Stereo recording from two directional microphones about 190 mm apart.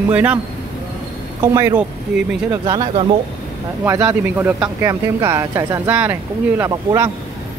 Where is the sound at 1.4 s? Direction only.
20° right (ahead or behind).